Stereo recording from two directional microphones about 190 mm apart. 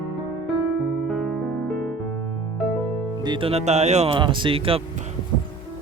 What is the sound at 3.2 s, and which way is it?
Speech, 25° right (ahead or behind).